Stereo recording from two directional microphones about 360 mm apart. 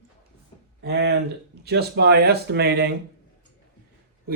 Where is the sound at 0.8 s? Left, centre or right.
Right.